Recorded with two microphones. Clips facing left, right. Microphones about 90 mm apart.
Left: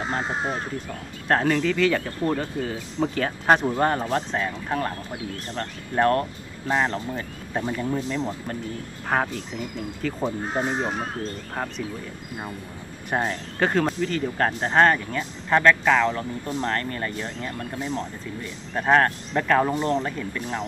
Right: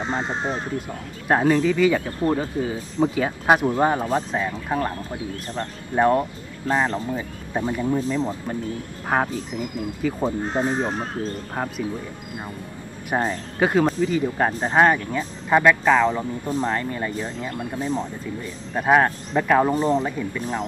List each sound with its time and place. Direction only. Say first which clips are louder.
0.0 s speech: right 1 dB; 5° left (ahead or behind)
1.2 s speech: right 3 dB; 10° right (ahead or behind)
11.5 s speech: right 1 dB; 10° right (ahead or behind)
13.1 s speech: right 2 dB; 5° right (ahead or behind)